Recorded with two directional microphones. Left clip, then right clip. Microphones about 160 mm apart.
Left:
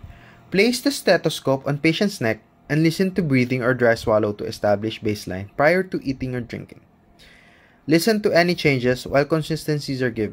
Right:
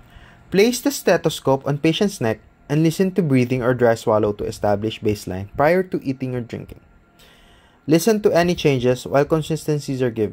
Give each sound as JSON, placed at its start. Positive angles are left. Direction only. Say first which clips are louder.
{"t": 0.5, "sound": "speech", "louder": "right 2 dB", "side_deg": -55}
{"t": 7.9, "sound": "speech", "louder": "right 2 dB", "side_deg": -35}